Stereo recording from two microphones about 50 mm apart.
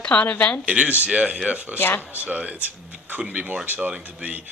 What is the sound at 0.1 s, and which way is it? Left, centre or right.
Speech, left.